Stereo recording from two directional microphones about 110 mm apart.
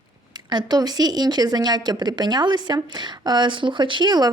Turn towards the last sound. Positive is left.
turn(degrees=-40)  # may be behind; listen again after turning